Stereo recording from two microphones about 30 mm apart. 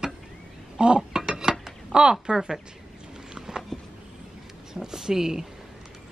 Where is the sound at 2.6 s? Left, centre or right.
Right.